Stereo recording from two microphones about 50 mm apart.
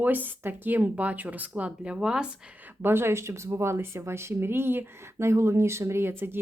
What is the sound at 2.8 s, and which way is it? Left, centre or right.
Speech, right.